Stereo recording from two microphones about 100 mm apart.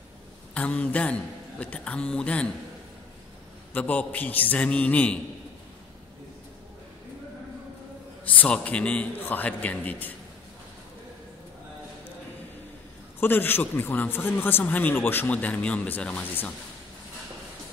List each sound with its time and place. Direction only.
0.6 s a man's voice: 15° left (ahead or behind)
3.7 s a man's voice: 15° left (ahead or behind)
8.3 s a man's voice: 15° left (ahead or behind)
13.2 s a man's voice: 20° left (ahead or behind)